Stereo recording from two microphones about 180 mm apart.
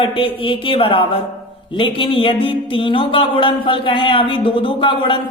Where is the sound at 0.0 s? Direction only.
30° left (ahead or behind).